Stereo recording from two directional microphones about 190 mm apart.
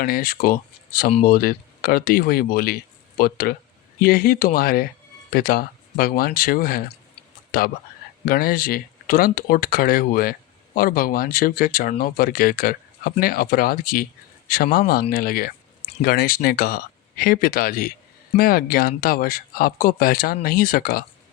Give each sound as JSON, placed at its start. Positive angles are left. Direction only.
{"t": 0.0, "sound": "speech", "side_deg": 50}